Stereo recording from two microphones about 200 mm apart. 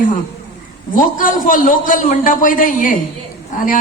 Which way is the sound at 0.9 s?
40° left (ahead or behind).